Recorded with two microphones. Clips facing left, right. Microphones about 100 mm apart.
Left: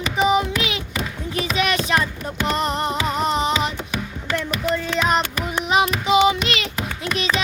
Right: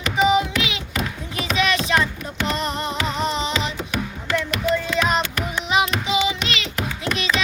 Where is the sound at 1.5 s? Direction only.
40° left (ahead or behind).